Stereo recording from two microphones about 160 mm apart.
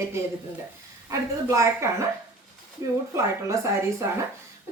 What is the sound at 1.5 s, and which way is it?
Speech, 20° right (ahead or behind).